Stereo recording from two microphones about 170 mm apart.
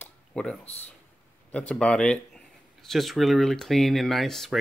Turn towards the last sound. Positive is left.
turn(degrees=0)  # may be behind; listen again after turning